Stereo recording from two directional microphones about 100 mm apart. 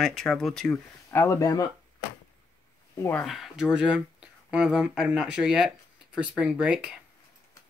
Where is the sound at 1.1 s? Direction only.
30° left (ahead or behind).